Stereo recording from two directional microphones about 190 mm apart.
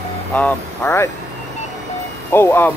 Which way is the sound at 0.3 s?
10° left (ahead or behind).